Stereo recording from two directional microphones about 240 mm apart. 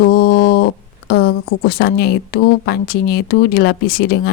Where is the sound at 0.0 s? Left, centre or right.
Left.